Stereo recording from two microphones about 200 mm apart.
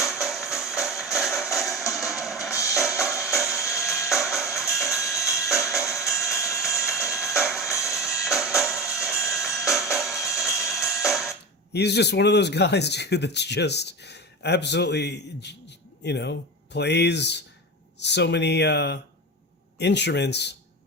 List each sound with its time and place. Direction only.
0.0 s music: centre (ahead or behind)
3.3 s a sound: centre (ahead or behind)
4.1 s music: centre (ahead or behind)
11.7 s speech: 55° left (ahead or behind)